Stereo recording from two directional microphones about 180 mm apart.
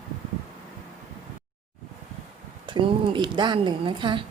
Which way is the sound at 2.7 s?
25° right (ahead or behind).